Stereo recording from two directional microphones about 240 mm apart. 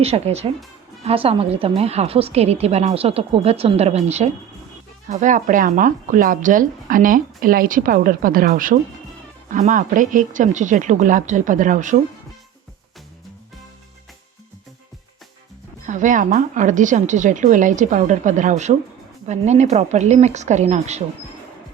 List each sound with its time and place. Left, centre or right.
0.0 s a woman's voice: right
15.9 s a woman's voice: right